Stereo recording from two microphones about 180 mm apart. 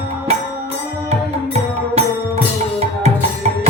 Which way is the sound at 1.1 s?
35° right (ahead or behind).